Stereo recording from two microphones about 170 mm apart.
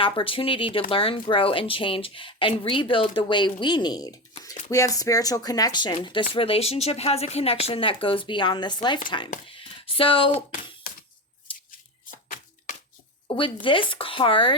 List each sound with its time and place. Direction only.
0.0 s speech: 30° left (ahead or behind)
9.5 s a sound: 30° left (ahead or behind)
13.2 s speech: 30° left (ahead or behind)